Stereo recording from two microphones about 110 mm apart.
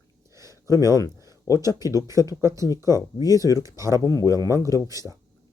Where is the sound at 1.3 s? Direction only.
35° left (ahead or behind).